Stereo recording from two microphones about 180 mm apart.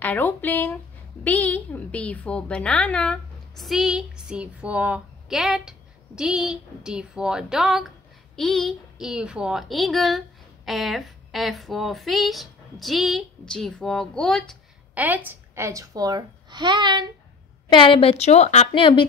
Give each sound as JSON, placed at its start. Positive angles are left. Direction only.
{"t": 0.0, "sound": "a woman's voice", "side_deg": 10}
{"t": 15.0, "sound": "a child's voice", "side_deg": -10}
{"t": 17.6, "sound": "a woman's voice", "side_deg": 25}